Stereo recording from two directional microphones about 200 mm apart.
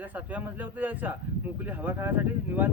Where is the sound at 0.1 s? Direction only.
10° right (ahead or behind).